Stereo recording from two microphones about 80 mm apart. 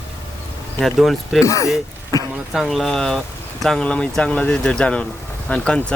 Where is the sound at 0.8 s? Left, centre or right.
Centre.